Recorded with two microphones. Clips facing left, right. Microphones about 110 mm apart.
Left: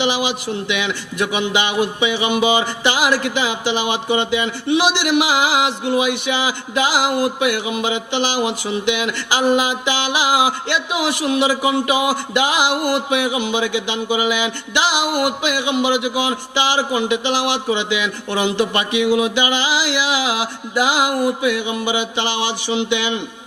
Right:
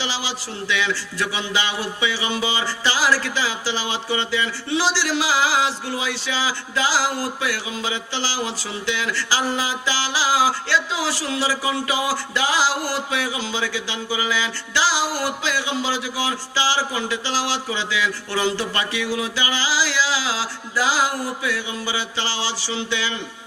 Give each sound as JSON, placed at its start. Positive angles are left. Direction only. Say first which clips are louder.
{"t": 0.0, "sound": "a man's voice", "louder": "left 8 dB", "side_deg": 20}